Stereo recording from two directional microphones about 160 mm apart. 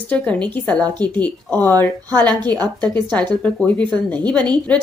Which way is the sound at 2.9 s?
10° left (ahead or behind).